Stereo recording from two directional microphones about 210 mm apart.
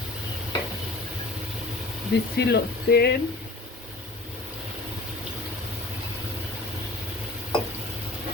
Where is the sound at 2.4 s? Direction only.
50° left (ahead or behind).